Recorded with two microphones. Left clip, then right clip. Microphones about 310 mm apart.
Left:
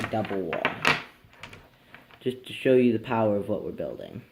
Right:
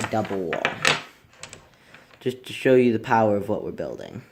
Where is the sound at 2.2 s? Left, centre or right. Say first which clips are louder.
Right 3 dB; right.